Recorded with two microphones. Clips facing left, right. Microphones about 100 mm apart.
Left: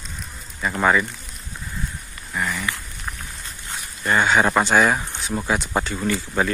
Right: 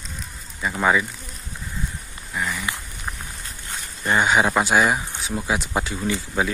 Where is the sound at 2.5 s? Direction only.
20° right (ahead or behind).